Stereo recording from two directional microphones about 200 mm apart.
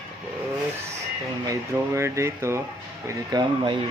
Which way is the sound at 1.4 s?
15° right (ahead or behind).